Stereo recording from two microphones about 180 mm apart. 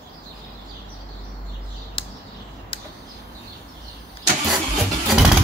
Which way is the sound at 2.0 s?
30° left (ahead or behind).